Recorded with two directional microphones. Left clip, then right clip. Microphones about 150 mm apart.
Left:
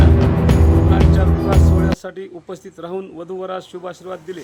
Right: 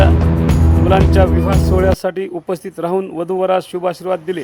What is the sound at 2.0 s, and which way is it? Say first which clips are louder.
A man's voice: right 11 dB; 35° right (ahead or behind).